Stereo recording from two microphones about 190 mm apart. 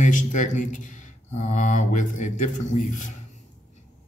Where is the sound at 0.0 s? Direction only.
40° left (ahead or behind).